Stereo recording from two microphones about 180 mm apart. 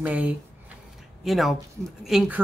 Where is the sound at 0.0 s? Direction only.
10° right (ahead or behind).